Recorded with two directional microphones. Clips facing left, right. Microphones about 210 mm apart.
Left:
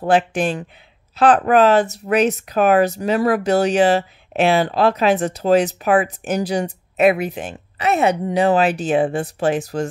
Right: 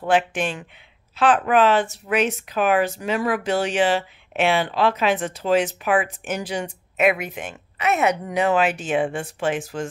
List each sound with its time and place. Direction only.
0.0 s speech: 35° left (ahead or behind)